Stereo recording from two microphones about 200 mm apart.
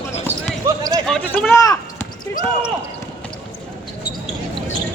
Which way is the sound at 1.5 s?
15° left (ahead or behind).